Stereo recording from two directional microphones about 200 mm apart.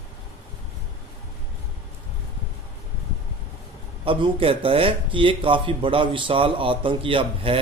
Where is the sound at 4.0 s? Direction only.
25° right (ahead or behind).